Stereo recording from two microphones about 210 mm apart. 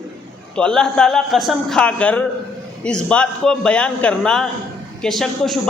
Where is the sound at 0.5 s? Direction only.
5° left (ahead or behind).